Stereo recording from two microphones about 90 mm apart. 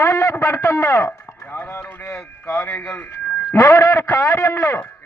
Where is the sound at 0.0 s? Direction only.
30° left (ahead or behind).